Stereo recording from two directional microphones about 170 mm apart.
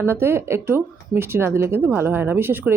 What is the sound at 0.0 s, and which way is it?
Speech, 15° right (ahead or behind).